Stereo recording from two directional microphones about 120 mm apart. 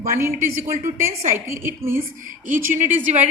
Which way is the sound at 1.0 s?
20° right (ahead or behind).